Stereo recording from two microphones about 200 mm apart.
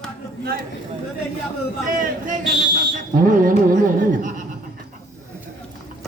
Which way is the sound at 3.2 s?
45° right (ahead or behind).